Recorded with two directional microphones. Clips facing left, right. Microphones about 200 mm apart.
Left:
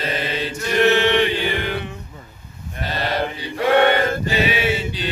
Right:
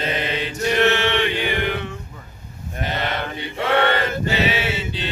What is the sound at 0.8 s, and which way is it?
Chant, 15° left (ahead or behind).